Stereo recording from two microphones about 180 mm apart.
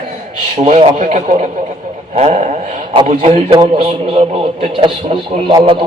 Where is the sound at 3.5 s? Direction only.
30° right (ahead or behind).